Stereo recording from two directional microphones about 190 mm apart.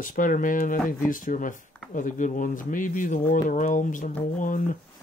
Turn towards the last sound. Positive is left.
turn(degrees=45)  # may be behind; listen again after turning